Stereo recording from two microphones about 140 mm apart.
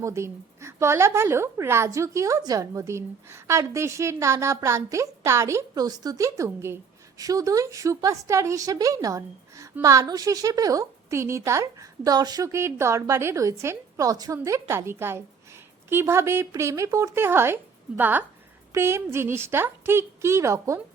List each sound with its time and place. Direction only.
0.0 s a woman's voice: 20° right (ahead or behind)